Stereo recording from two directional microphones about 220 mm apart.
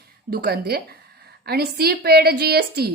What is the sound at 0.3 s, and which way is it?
A woman's voice, 45° right (ahead or behind).